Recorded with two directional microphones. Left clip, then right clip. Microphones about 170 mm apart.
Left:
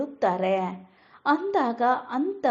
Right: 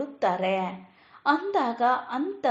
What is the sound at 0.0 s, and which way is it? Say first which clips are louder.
A woman's voice: left 1 dB; 40° left (ahead or behind).